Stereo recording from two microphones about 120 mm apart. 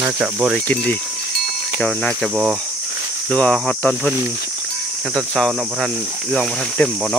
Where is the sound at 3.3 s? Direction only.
10° left (ahead or behind).